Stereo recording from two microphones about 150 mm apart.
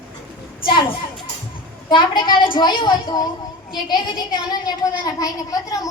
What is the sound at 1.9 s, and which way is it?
A child's voice, 30° left (ahead or behind).